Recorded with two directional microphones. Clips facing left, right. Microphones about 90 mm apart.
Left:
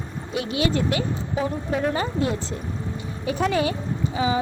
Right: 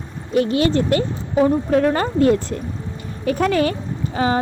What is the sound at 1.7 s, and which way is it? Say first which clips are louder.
A woman's voice: right 7 dB; 65° right (ahead or behind).